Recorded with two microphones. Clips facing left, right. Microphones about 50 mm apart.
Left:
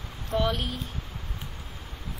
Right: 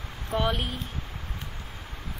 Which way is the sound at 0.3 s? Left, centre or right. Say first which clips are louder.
Even; centre.